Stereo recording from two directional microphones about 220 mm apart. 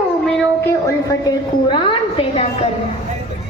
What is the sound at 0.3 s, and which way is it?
A woman's voice, 10° left (ahead or behind).